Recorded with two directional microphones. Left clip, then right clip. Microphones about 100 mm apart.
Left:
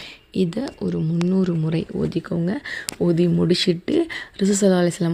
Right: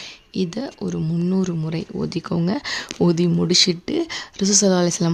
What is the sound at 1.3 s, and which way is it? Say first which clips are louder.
Speech: left 2 dB; centre (ahead or behind).